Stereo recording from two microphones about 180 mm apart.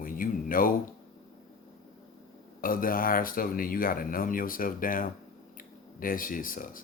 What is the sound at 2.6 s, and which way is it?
Speech, 50° left (ahead or behind).